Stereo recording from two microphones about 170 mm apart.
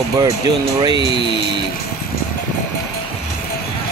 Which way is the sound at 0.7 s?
25° right (ahead or behind).